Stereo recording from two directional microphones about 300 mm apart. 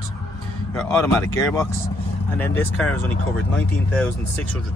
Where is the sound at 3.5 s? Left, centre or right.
Centre.